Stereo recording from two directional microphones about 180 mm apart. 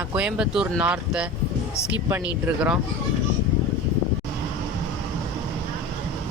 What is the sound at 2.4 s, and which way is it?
Speech, 5° right (ahead or behind).